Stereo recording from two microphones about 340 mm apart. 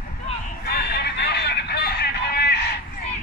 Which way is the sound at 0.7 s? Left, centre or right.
Left.